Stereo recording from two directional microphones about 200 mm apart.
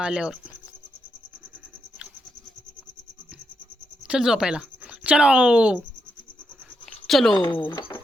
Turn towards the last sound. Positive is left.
turn(degrees=20)  # may be behind; listen again after turning